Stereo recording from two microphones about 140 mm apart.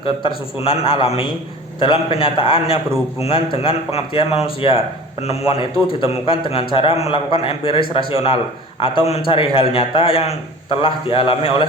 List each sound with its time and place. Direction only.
0.0 s a man's voice: 40° left (ahead or behind)